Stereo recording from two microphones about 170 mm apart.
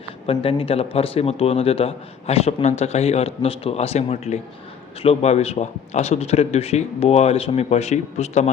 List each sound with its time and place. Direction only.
0.3 s speech: 35° left (ahead or behind)